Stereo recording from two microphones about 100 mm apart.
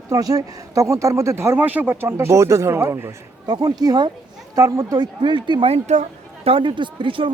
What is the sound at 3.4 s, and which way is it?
Speech, 45° right (ahead or behind).